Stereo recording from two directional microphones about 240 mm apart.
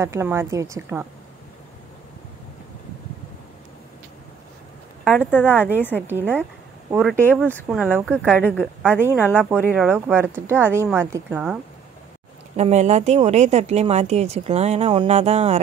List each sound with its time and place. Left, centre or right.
0.0 s a woman's voice: centre
5.0 s speech: centre
5.5 s a woman's voice: centre
5.8 s speech: centre
9.5 s a woman's voice: centre
12.5 s a woman's voice: right